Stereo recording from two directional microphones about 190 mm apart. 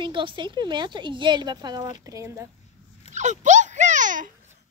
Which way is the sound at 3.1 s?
40° right (ahead or behind).